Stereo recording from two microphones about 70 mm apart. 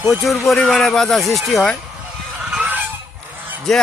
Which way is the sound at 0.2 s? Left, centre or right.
Centre.